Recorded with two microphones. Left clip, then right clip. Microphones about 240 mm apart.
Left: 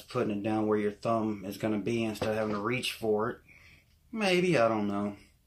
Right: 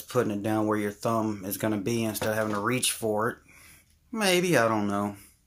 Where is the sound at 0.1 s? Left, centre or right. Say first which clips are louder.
Right 4 dB; right.